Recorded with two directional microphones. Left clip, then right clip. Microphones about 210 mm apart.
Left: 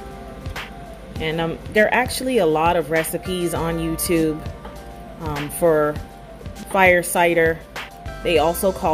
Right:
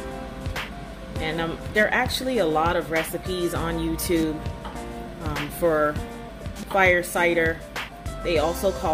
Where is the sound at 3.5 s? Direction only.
30° left (ahead or behind).